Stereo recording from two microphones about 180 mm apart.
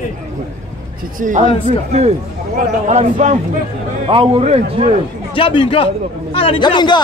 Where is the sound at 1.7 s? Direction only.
35° right (ahead or behind).